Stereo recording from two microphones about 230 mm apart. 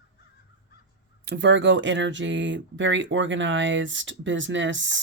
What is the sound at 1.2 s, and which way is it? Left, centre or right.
Speech, right.